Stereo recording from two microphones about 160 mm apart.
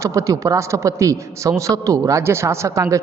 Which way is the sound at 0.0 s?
20° right (ahead or behind).